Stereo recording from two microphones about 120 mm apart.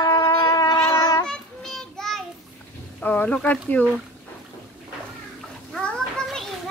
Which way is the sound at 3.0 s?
15° left (ahead or behind).